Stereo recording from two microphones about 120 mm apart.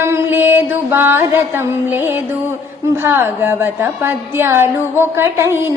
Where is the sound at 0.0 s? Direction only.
20° right (ahead or behind).